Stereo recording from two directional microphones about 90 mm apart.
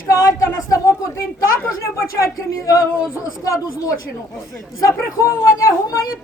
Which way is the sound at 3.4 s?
35° left (ahead or behind).